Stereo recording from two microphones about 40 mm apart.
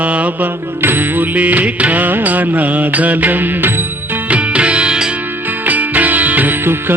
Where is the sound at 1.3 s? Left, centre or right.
Right.